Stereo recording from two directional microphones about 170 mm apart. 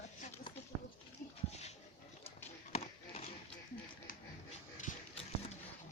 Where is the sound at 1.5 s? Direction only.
40° left (ahead or behind).